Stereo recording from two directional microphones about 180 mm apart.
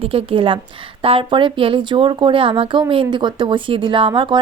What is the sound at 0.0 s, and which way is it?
A woman's voice, 30° right (ahead or behind).